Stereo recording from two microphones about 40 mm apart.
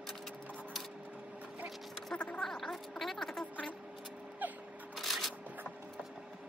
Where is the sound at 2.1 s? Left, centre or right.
Left.